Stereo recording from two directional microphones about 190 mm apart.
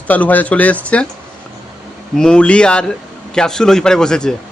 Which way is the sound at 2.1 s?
5° left (ahead or behind).